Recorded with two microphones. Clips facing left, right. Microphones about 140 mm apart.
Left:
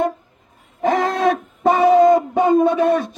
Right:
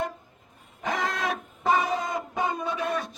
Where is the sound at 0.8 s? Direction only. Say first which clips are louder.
Left 11 dB; 55° left (ahead or behind).